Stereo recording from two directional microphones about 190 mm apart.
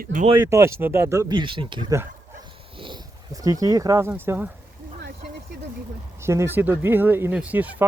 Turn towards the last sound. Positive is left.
turn(degrees=-10)  # may be behind; listen again after turning